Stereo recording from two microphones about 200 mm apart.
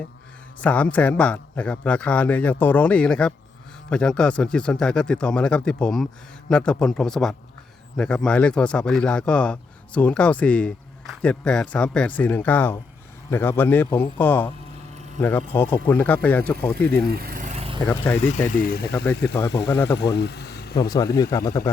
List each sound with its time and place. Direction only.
0.6 s a man's voice: 5° left (ahead or behind)
15.5 s a man's voice: 10° left (ahead or behind)
17.1 s vehicle: 50° right (ahead or behind); by 17.7 s 35° right (ahead or behind)
18.4 s speech: 45° left (ahead or behind)
18.9 s a man's voice: 10° left (ahead or behind)
20.1 s vehicle: 55° left (ahead or behind)
20.7 s a man's voice: 20° left (ahead or behind)